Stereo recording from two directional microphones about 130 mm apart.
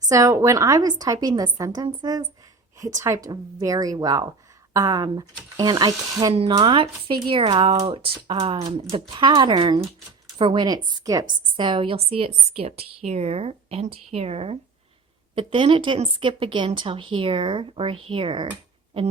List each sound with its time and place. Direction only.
0.0 s a woman's voice: 25° right (ahead or behind); by 18.4 s 40° right (ahead or behind)